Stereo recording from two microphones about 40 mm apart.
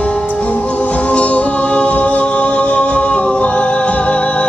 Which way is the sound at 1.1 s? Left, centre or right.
Left.